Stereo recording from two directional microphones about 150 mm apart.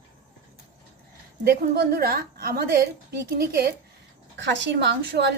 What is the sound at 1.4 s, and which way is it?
A woman's voice, 90° right.